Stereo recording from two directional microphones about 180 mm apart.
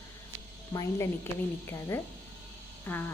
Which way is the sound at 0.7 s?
20° left (ahead or behind).